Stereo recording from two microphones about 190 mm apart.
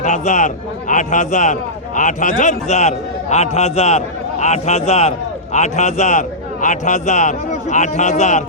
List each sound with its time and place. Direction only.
0.0 s a man's voice: 40° left (ahead or behind)